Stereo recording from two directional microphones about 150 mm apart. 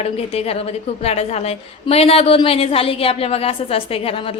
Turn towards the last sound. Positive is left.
turn(degrees=40)  # may be behind; listen again after turning